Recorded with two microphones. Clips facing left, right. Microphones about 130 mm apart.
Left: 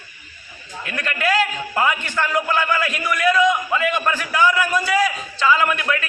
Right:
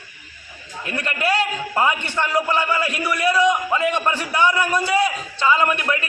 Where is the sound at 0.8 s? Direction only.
30° right (ahead or behind).